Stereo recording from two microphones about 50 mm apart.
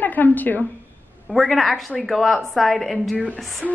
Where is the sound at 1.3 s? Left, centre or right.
Centre.